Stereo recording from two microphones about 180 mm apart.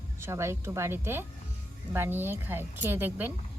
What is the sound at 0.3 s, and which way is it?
A woman's voice, 15° right (ahead or behind).